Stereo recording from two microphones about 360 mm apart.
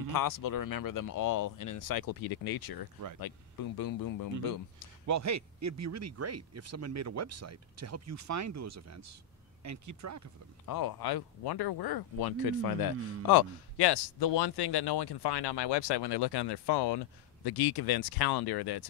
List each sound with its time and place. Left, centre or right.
0.1 s speech: left
5.0 s speech: right
10.6 s speech: left